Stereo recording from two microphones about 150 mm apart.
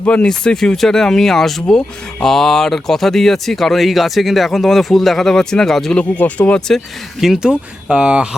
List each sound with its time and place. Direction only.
0.0 s speech: 10° left (ahead or behind)